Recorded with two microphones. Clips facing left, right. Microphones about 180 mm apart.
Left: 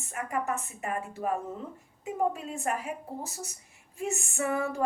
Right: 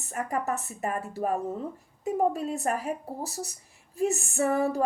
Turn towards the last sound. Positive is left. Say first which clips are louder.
# right 4 dB
turn(degrees=-35)  # may be behind; listen again after turning